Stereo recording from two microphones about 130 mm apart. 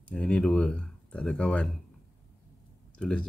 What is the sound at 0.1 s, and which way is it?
Speech, 5° left (ahead or behind).